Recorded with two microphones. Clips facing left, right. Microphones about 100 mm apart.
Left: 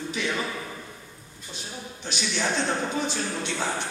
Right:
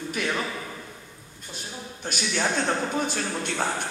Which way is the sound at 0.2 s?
50° right (ahead or behind).